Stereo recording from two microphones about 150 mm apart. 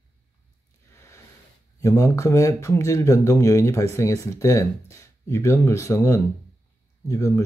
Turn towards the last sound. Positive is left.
turn(degrees=20)  # may be behind; listen again after turning